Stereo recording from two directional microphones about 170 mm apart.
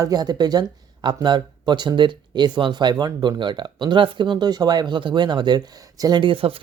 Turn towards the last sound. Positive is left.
turn(degrees=-30)  # may be behind; listen again after turning